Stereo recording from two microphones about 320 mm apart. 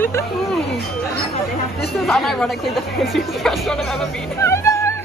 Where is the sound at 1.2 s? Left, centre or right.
Left.